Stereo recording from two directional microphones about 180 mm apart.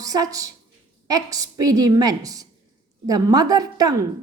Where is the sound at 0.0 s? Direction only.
20° right (ahead or behind).